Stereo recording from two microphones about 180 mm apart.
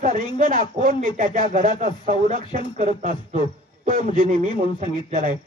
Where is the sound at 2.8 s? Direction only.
40° right (ahead or behind).